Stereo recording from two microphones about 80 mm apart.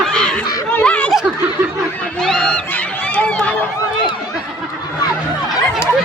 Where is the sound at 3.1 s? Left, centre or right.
Centre.